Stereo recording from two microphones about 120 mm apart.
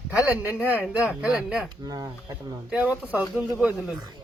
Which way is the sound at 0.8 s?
5° right (ahead or behind).